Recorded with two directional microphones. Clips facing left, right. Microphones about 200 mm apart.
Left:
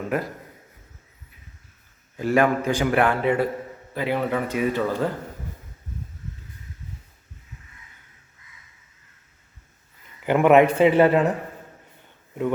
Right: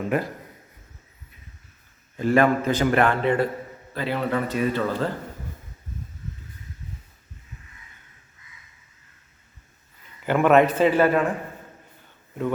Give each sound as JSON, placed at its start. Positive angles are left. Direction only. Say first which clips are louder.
{"t": 0.1, "sound": "a man's voice", "louder": "right 1 dB", "side_deg": 0}
{"t": 2.1, "sound": "a man's voice", "louder": "right 1 dB", "side_deg": 10}
{"t": 10.2, "sound": "a man's voice", "louder": "left 2 dB", "side_deg": 15}